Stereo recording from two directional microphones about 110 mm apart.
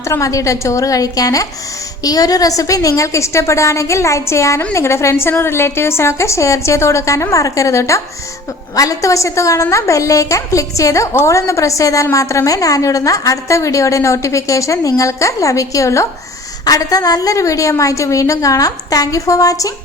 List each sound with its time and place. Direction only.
0.1 s a woman's voice: 30° left (ahead or behind)